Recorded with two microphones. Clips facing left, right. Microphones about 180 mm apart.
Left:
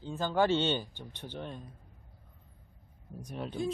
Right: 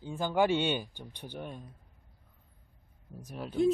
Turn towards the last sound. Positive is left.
turn(degrees=-5)  # may be behind; listen again after turning